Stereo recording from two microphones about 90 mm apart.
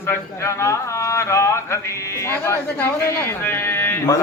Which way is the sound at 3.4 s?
25° left (ahead or behind).